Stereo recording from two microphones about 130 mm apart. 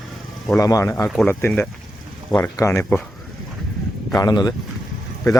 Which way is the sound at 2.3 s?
25° left (ahead or behind).